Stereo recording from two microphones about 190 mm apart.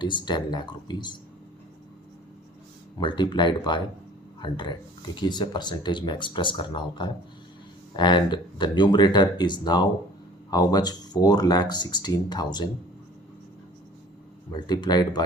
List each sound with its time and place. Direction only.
0.0 s speech: 25° left (ahead or behind)
3.0 s speech: 25° left (ahead or behind)
14.5 s speech: 20° left (ahead or behind)